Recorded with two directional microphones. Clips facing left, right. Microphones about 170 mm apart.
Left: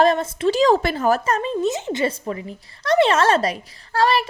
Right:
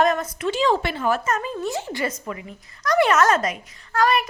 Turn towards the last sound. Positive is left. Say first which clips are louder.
# left 1 dB
turn(degrees=30)  # may be behind; listen again after turning